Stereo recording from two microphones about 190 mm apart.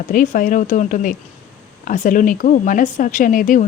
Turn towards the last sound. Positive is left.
turn(degrees=45)  # may be behind; listen again after turning